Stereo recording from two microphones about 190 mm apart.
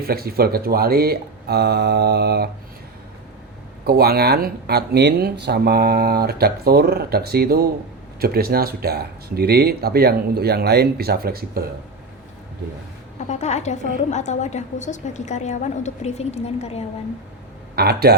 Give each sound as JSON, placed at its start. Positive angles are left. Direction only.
{"t": 0.0, "sound": "speech", "side_deg": -55}
{"t": 3.8, "sound": "speech", "side_deg": -55}
{"t": 13.1, "sound": "a woman's voice", "side_deg": 40}
{"t": 17.7, "sound": "speech", "side_deg": -55}